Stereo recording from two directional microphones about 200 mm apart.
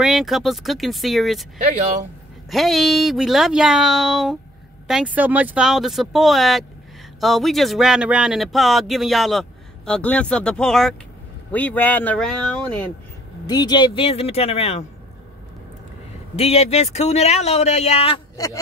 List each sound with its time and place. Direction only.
0.0 s speech: centre (ahead or behind)
2.5 s speech: centre (ahead or behind)
13.5 s speech: 20° left (ahead or behind)
16.3 s speech: 30° left (ahead or behind)
18.3 s a man's voice: 15° left (ahead or behind)